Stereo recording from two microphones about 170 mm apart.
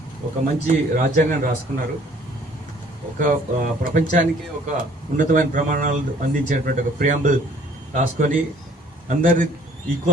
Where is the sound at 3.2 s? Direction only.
55° right (ahead or behind).